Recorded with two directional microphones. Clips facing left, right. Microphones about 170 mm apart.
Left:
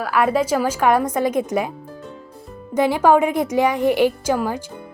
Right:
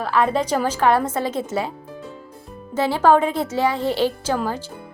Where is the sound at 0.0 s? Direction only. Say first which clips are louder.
Left 1 dB; 10° left (ahead or behind).